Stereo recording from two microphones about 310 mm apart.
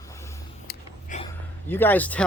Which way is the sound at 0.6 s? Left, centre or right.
Left.